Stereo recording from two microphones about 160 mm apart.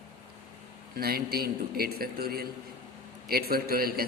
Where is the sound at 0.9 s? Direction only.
70° right (ahead or behind).